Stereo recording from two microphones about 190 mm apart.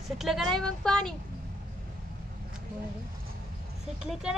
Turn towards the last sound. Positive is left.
turn(degrees=-5)  # may be behind; listen again after turning